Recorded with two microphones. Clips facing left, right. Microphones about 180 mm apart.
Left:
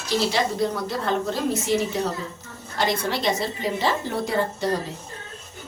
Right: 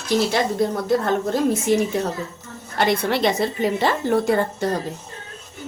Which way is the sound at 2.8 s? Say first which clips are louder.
Right 5 dB; 60° right (ahead or behind).